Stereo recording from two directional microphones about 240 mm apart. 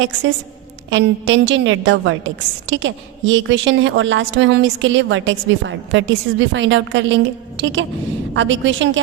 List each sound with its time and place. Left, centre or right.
0.9 s a woman's voice: right